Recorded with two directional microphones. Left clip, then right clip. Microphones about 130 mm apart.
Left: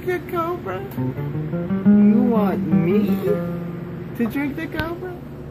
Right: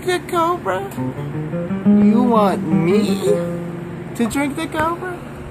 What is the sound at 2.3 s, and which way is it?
Speech, 30° right (ahead or behind).